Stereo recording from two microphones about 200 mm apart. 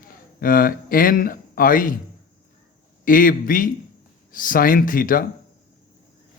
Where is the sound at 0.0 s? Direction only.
45° left (ahead or behind).